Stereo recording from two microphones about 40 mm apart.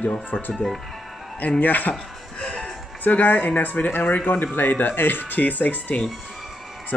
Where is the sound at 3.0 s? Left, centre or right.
Left.